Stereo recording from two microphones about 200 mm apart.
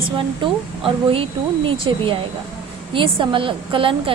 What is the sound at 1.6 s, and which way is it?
A woman's voice, 25° right (ahead or behind).